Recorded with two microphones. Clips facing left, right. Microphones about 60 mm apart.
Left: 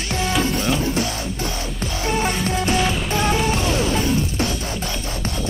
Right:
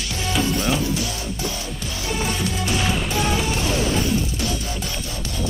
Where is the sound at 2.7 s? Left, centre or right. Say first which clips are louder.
Left 2 dB; centre.